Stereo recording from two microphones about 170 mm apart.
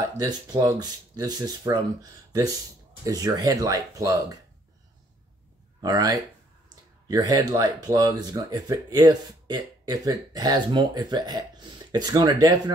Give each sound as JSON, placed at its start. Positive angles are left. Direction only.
{"t": 0.2, "sound": "speech", "side_deg": -20}
{"t": 3.0, "sound": "speech", "side_deg": -20}
{"t": 5.8, "sound": "speech", "side_deg": -20}